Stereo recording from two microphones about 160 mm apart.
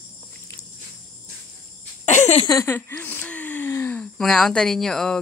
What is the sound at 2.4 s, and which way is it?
Speech, 20° left (ahead or behind).